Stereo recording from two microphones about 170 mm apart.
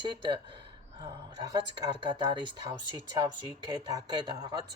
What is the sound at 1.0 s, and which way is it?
Speech, 20° right (ahead or behind).